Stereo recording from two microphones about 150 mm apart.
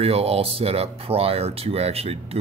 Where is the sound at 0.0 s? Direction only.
40° right (ahead or behind).